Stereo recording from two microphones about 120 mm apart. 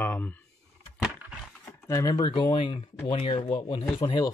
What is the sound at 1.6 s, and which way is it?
Speech, 25° left (ahead or behind).